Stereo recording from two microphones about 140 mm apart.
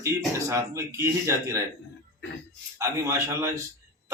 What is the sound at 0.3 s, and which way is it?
Speech, 20° right (ahead or behind).